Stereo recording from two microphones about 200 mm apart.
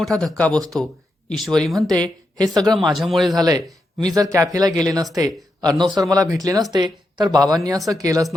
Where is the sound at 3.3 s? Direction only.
20° right (ahead or behind).